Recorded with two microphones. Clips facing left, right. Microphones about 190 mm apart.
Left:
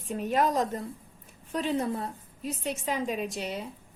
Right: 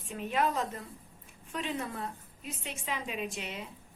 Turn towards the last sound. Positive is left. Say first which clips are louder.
# left 5 dB
turn(degrees=40)  # may be behind; listen again after turning